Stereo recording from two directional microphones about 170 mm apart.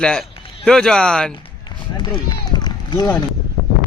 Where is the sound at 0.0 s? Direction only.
5° left (ahead or behind).